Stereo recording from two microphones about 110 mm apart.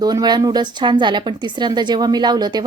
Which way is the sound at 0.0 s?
35° right (ahead or behind).